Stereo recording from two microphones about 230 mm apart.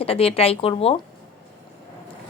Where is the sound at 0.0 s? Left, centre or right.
Left.